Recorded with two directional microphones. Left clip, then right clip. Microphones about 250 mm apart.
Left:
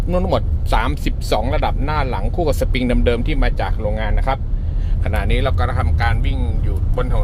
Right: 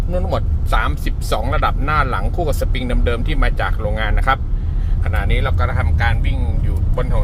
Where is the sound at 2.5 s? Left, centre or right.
Centre.